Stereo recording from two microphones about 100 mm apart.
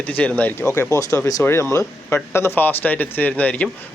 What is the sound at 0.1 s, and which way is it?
Speech, 15° left (ahead or behind).